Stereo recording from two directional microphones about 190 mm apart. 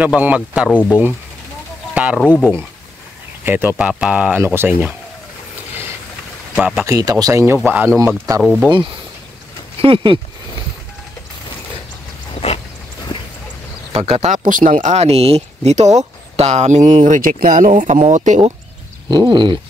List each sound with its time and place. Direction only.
0.0 s speech: 10° right (ahead or behind)
0.7 s speech: 10° left (ahead or behind)
2.0 s speech: 5° right (ahead or behind)
3.4 s speech: 10° right (ahead or behind)
6.5 s speech: 5° right (ahead or behind)
7.0 s speech: 20° right (ahead or behind)
8.4 s speech: 5° right (ahead or behind)
9.8 s speech: 30° right (ahead or behind)
13.9 s speech: 30° right (ahead or behind)
19.0 s speech: 20° right (ahead or behind)